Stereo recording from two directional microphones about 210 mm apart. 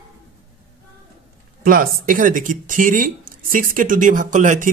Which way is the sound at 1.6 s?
45° right (ahead or behind).